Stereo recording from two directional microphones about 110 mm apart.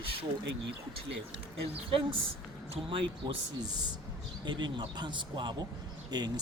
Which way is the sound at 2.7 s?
50° right (ahead or behind).